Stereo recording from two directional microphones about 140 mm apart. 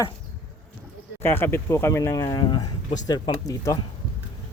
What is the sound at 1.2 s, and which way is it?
Speech, 15° left (ahead or behind).